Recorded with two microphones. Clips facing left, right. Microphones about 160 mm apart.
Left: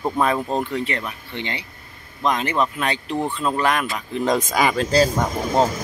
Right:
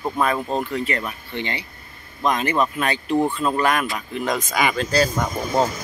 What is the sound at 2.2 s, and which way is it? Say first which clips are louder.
Speech: even; 10° right (ahead or behind).